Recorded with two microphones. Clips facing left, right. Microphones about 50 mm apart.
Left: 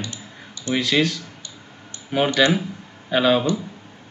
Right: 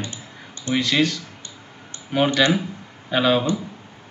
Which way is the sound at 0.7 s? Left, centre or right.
Centre.